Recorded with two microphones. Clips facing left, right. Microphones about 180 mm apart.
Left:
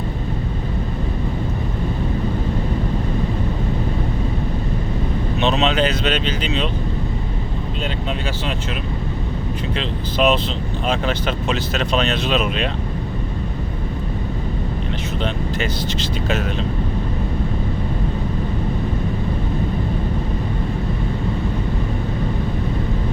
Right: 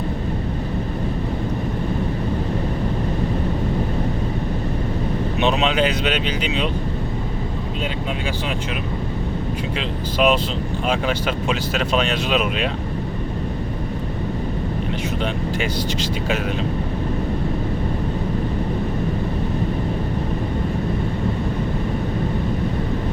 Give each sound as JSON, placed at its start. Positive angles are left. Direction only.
{"t": 5.4, "sound": "speech", "side_deg": -10}
{"t": 9.7, "sound": "speech", "side_deg": -10}
{"t": 15.2, "sound": "speech", "side_deg": -10}